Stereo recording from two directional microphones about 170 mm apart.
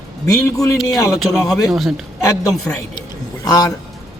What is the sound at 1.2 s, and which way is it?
Speech, centre (ahead or behind).